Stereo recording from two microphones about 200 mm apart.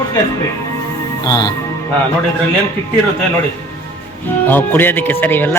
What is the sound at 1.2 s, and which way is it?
Speech, 20° left (ahead or behind).